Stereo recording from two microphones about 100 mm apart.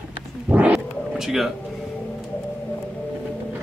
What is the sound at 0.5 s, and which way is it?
Roaring cats, 15° right (ahead or behind).